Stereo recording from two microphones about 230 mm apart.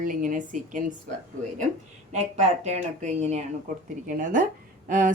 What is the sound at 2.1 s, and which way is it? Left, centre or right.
Speech, right.